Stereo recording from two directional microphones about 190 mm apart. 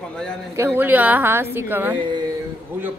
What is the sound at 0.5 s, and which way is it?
A woman's voice, 10° right (ahead or behind).